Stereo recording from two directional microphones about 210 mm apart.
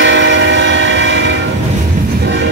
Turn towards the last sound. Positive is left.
turn(degrees=-60)  # may be behind; listen again after turning